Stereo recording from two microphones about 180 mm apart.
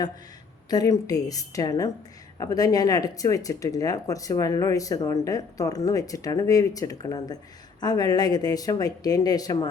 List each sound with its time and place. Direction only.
0.7 s speech: 20° left (ahead or behind)